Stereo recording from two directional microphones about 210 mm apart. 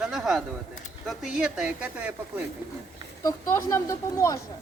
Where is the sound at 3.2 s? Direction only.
15° left (ahead or behind).